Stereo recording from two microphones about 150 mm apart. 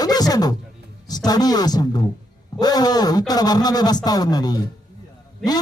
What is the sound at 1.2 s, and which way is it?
A man's voice, 25° left (ahead or behind).